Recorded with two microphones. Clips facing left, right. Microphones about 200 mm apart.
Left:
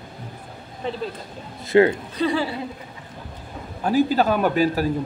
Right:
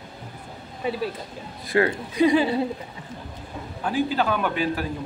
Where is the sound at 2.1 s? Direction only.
15° right (ahead or behind).